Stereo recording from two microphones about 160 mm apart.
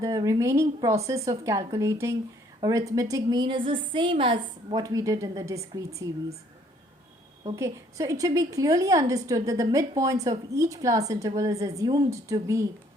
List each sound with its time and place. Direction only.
0.0 s a woman's voice: 20° right (ahead or behind)
7.5 s a woman's voice: 20° right (ahead or behind)